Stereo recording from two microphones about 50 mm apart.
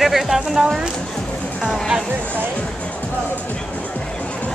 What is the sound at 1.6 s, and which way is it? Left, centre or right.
Music, centre.